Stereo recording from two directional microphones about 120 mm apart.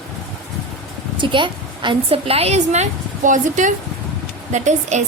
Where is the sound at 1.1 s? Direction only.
45° right (ahead or behind).